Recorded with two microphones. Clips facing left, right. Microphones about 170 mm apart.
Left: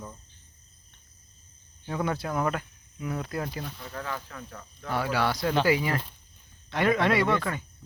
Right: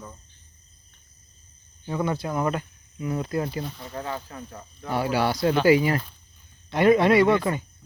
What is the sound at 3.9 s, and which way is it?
Speech, 25° right (ahead or behind).